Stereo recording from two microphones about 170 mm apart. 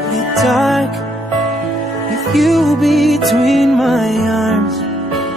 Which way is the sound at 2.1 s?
Centre (ahead or behind).